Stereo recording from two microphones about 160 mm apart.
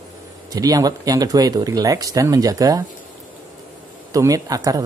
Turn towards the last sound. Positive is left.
turn(degrees=-25)  # may be behind; listen again after turning